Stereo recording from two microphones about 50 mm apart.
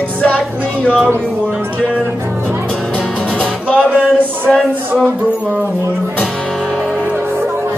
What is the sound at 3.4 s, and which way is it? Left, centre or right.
Music, left.